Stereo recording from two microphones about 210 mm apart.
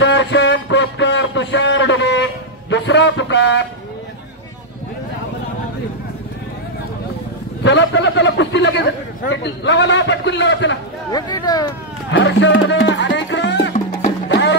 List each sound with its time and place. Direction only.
0.0 s a sound: 55° left (ahead or behind)
2.7 s speech: 55° left (ahead or behind)
7.6 s a man's voice: 60° left (ahead or behind)
11.1 s speech: 20° left (ahead or behind)
12.1 s music: 60° left (ahead or behind)